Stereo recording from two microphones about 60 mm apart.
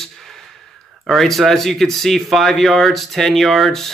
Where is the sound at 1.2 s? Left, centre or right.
Centre.